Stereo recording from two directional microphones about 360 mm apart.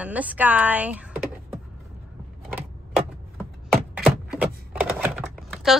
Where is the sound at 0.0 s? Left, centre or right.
Centre.